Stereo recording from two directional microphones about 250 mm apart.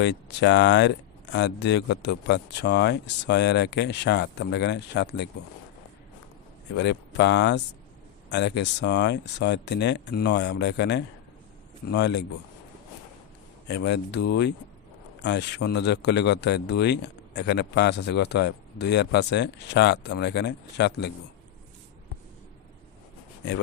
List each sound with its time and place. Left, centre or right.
0.0 s speech: left
6.7 s speech: left
13.7 s speech: left